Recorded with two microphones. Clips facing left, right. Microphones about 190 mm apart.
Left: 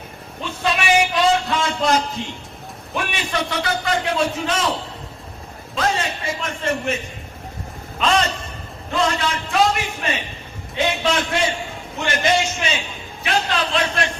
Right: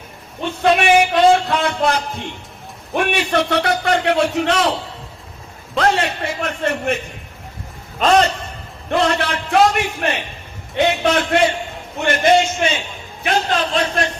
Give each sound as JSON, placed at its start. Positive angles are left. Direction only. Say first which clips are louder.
{"t": 0.4, "sound": "a sound", "louder": "right 6 dB", "side_deg": -60}
{"t": 2.9, "sound": "a man's voice", "louder": "right 7 dB", "side_deg": -60}
{"t": 5.7, "sound": "a man's voice", "louder": "right 5 dB", "side_deg": -65}
{"t": 7.9, "sound": "a man's voice", "louder": "right 5 dB", "side_deg": -40}
{"t": 8.9, "sound": "a man's voice", "louder": "right 3 dB", "side_deg": -65}
{"t": 13.2, "sound": "speech", "louder": "right 3 dB", "side_deg": -45}